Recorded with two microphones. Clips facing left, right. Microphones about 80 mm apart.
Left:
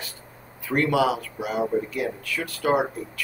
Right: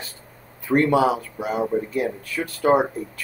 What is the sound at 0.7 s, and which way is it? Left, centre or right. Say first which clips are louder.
Speech: right 4 dB; right.